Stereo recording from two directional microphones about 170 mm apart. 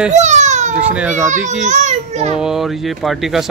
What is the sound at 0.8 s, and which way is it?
Speech, 5° right (ahead or behind).